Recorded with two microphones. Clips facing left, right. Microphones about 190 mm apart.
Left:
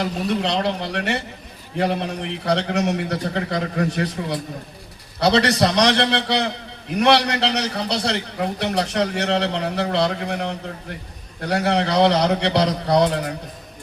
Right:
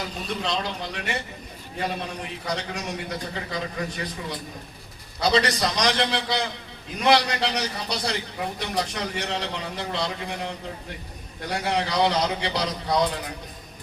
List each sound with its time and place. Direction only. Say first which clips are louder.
0.0 s a man's voice: left 8 dB; 65° left (ahead or behind)